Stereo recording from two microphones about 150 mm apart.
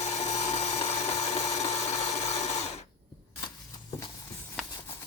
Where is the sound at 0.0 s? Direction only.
45° left (ahead or behind).